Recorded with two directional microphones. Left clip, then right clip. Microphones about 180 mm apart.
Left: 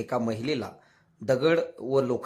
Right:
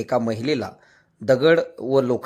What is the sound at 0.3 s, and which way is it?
Speech, 15° right (ahead or behind).